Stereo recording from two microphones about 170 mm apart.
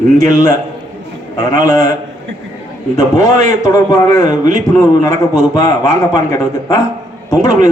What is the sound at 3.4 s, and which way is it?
A man's voice, 20° left (ahead or behind).